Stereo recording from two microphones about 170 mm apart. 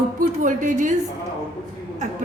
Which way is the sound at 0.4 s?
50° right (ahead or behind).